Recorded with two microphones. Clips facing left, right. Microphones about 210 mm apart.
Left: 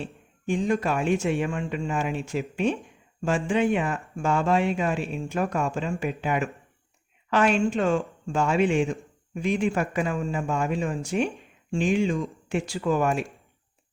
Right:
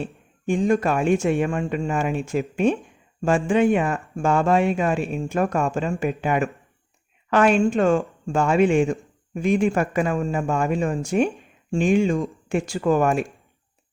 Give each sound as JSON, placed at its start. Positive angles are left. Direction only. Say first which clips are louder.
{"t": 0.0, "sound": "speech", "louder": "right 5 dB", "side_deg": -50}